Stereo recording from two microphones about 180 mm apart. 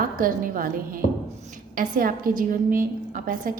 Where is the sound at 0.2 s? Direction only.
50° right (ahead or behind).